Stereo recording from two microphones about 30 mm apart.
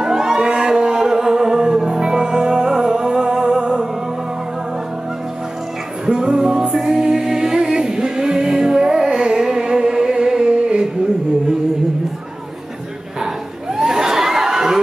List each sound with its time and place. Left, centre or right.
0.0 s music: centre
6.0 s music: right
13.7 s crowd: centre